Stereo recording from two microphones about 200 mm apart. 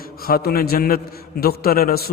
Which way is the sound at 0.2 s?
50° left (ahead or behind).